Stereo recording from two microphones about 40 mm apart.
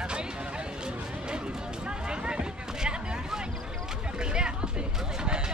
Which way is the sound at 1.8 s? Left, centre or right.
Right.